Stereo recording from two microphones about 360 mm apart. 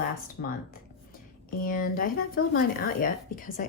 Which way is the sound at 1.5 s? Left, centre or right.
Left.